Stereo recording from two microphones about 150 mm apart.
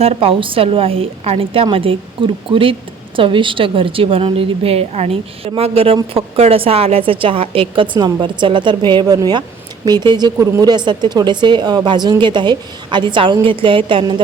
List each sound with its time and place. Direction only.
0.0 s a woman's voice: 40° right (ahead or behind)